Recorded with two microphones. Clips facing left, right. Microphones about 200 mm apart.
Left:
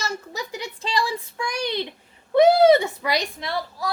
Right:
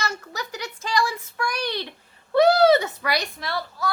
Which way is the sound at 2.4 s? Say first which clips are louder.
Left 2 dB; 20° left (ahead or behind).